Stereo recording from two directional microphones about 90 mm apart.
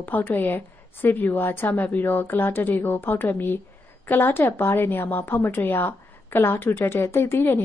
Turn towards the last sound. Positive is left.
turn(degrees=25)  # may be behind; listen again after turning